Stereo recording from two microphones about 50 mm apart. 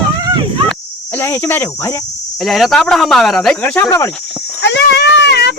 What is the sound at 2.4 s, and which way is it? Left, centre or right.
Speech, centre.